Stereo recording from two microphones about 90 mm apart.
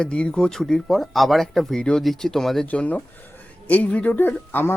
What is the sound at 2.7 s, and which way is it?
A woman's voice, 15° left (ahead or behind).